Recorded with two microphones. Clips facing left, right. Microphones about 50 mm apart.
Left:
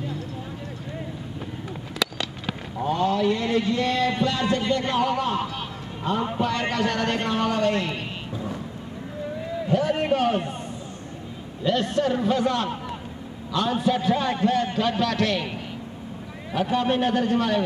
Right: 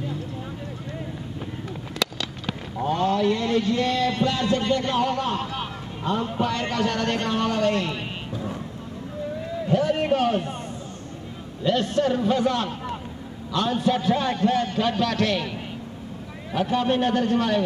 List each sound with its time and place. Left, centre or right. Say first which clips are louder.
2.0 s a sound: even; centre
2.4 s a man's voice: right 1 dB; centre
9.7 s a man's voice: right 1 dB; centre
11.6 s a man's voice: right 1 dB; centre
16.5 s a man's voice: even; centre